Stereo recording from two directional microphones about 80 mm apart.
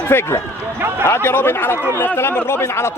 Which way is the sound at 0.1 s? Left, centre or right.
Left.